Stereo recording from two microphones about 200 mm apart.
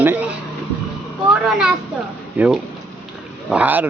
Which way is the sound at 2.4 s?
10° right (ahead or behind).